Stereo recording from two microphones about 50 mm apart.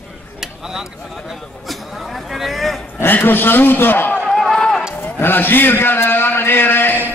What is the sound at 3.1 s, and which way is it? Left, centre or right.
A man's voice, left.